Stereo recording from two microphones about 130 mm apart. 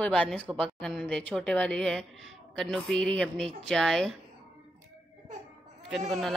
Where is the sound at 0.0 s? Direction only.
5° left (ahead or behind).